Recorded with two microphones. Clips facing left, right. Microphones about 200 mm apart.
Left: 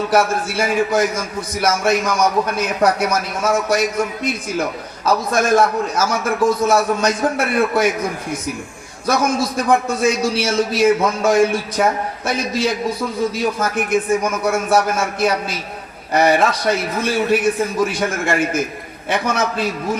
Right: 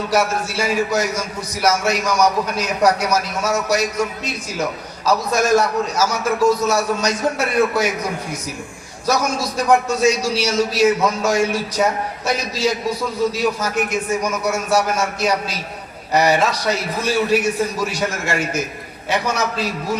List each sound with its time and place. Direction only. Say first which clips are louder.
0.1 s a man's voice: left 1 dB; 55° left (ahead or behind)
9.0 s a man's voice: left 2 dB; 55° left (ahead or behind)